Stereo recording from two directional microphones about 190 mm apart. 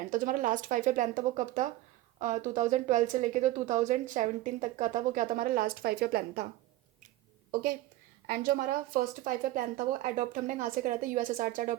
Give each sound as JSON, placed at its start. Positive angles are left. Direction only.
{"t": 0.1, "sound": "a woman's voice", "side_deg": -45}
{"t": 8.3, "sound": "speech", "side_deg": -50}